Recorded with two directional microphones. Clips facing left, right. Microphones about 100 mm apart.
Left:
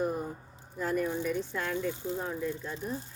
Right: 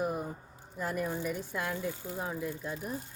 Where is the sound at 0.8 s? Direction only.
5° right (ahead or behind).